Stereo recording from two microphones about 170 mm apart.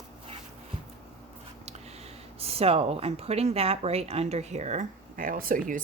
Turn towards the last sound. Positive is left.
turn(degrees=-50)  # may be behind; listen again after turning